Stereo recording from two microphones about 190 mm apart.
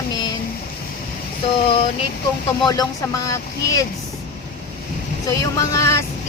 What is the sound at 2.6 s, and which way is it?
Speech, 20° left (ahead or behind).